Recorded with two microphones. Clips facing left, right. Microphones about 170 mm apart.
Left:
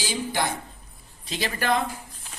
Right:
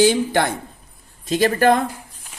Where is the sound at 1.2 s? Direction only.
45° right (ahead or behind).